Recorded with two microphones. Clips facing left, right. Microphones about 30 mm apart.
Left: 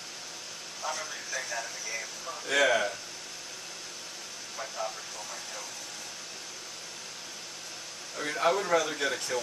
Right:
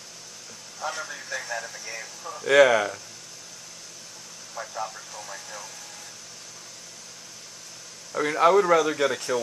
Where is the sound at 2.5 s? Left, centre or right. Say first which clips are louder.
Right 8 dB; right.